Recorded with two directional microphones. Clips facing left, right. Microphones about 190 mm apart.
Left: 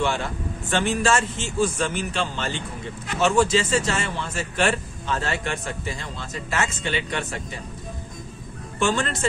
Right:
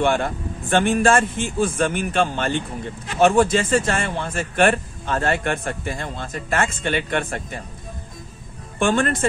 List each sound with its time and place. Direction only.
0.0 s a man's voice: 55° right (ahead or behind)
8.7 s a man's voice: 55° right (ahead or behind)